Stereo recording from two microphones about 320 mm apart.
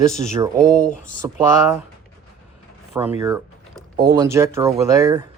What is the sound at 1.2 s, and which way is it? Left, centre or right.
Speech, centre.